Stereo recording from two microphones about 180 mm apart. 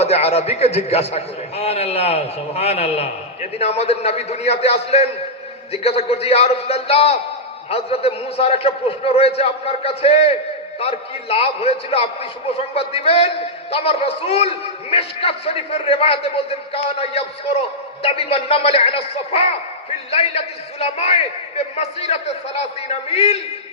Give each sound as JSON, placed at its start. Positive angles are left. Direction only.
{"t": 0.0, "sound": "a man's voice", "side_deg": 35}